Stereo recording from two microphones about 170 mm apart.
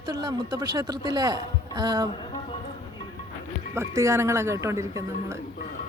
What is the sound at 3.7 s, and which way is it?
Speech, 15° right (ahead or behind).